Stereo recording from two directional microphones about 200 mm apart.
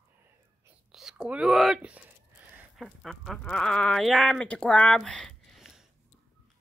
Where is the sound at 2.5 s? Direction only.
Centre (ahead or behind).